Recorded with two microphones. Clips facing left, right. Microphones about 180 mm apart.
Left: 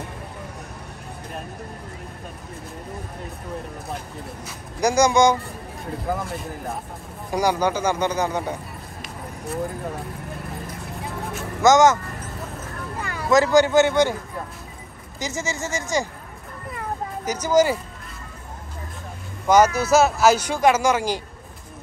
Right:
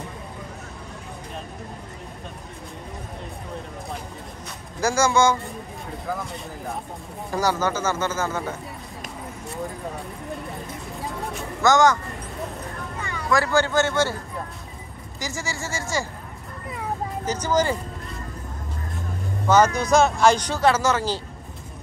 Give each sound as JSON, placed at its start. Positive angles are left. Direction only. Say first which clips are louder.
{"t": 4.7, "sound": "speech", "louder": "left 3 dB", "side_deg": 15}
{"t": 7.3, "sound": "speech", "louder": "left 2 dB", "side_deg": 15}
{"t": 11.6, "sound": "speech", "louder": "left 3 dB", "side_deg": 20}
{"t": 13.3, "sound": "speech", "louder": "left 5 dB", "side_deg": 20}
{"t": 15.1, "sound": "speech", "louder": "left 3 dB", "side_deg": 20}
{"t": 17.2, "sound": "speech", "louder": "left 5 dB", "side_deg": 10}
{"t": 19.4, "sound": "speech", "louder": "left 2 dB", "side_deg": 10}